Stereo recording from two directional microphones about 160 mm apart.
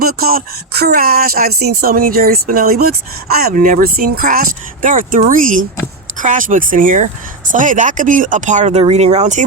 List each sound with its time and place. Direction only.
0.0 s speech: 70° right (ahead or behind); by 9.4 s 45° right (ahead or behind)